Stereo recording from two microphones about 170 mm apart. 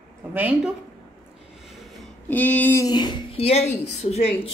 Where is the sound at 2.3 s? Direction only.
10° left (ahead or behind); by 4.5 s 35° left (ahead or behind).